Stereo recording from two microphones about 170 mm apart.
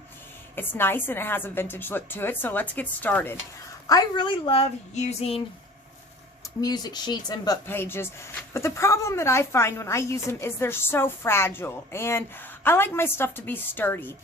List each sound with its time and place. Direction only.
0.5 s a woman's voice: 10° left (ahead or behind)
3.8 s speech: 25° left (ahead or behind)
6.4 s a woman's voice: 25° left (ahead or behind)